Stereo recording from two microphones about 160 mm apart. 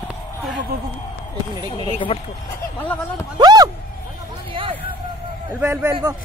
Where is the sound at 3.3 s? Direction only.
25° right (ahead or behind).